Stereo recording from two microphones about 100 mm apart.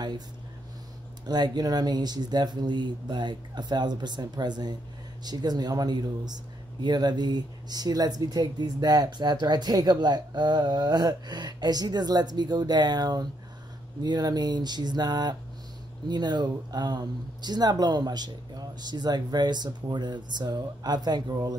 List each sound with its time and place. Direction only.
1.2 s speech: 45° right (ahead or behind)